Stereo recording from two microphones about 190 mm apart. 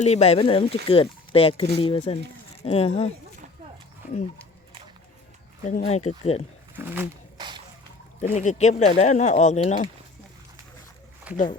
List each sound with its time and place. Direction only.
0.0 s speech: 35° left (ahead or behind)
5.6 s speech: 40° left (ahead or behind)
6.7 s speech: 10° right (ahead or behind)
7.3 s a sound: 25° right (ahead or behind)
8.2 s speech: 35° left (ahead or behind)
11.3 s speech: 5° right (ahead or behind)